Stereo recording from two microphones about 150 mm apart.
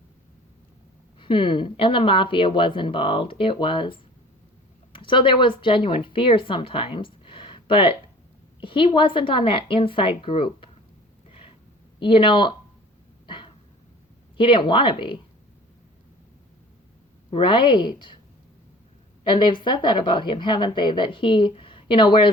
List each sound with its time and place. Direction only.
1.2 s speech: 35° left (ahead or behind)
11.3 s a sound: 40° left (ahead or behind)
11.9 s speech: 35° left (ahead or behind)
13.2 s a sound: 35° left (ahead or behind)
14.3 s speech: 35° left (ahead or behind)
17.3 s speech: 35° left (ahead or behind)
19.3 s speech: 30° left (ahead or behind)